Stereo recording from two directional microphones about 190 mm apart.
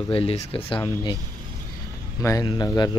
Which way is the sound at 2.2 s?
20° left (ahead or behind).